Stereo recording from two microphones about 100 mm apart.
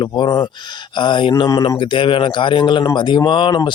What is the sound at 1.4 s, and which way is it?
Speech, 40° left (ahead or behind).